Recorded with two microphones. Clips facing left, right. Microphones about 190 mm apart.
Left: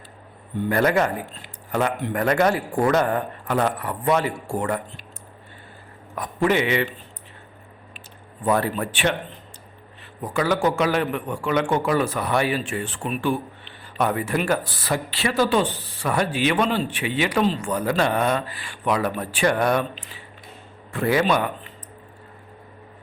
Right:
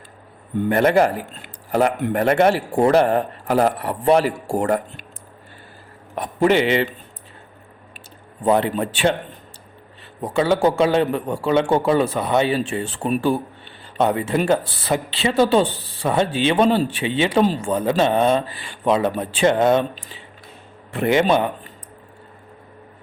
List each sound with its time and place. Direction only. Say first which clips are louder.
0.7 s speech: right 4 dB; 25° right (ahead or behind)
6.1 s speech: right 4 dB; 30° right (ahead or behind)
8.4 s speech: right 4 dB; 20° right (ahead or behind)
10.2 s speech: right 4 dB; 25° right (ahead or behind)
14.0 s speech: right 4 dB; 25° right (ahead or behind)